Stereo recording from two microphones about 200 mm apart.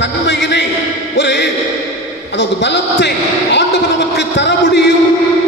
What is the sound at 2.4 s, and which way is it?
A man's voice, 60° left (ahead or behind).